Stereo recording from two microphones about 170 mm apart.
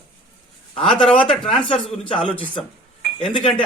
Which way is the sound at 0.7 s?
30° left (ahead or behind).